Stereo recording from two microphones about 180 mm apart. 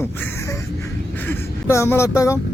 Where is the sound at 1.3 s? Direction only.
15° left (ahead or behind).